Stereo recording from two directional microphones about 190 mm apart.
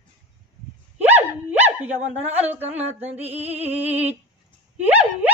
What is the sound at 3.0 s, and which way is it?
Music, 35° right (ahead or behind).